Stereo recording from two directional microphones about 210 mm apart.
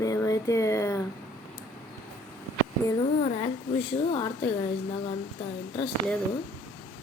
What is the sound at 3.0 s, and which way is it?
A woman's voice, 30° left (ahead or behind).